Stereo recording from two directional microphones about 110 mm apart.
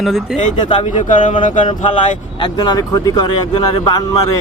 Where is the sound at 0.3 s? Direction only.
90° left.